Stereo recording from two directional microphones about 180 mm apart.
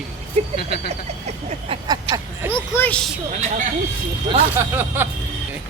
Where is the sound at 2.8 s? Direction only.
5° left (ahead or behind).